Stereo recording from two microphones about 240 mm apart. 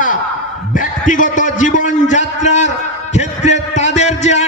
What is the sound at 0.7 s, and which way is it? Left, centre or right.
A man's voice, left.